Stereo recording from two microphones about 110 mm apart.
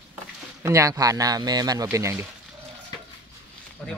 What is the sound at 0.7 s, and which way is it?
Speech, 30° right (ahead or behind).